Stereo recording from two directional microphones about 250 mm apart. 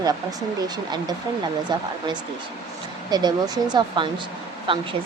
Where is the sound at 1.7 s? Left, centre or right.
Centre.